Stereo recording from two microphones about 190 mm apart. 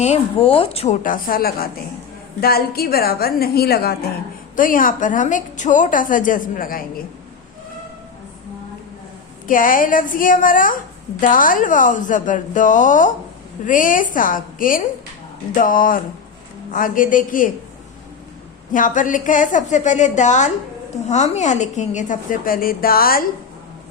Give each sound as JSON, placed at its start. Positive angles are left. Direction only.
{"t": 0.0, "sound": "a woman's voice", "side_deg": 35}
{"t": 9.5, "sound": "a woman's voice", "side_deg": 45}
{"t": 18.7, "sound": "a woman's voice", "side_deg": 45}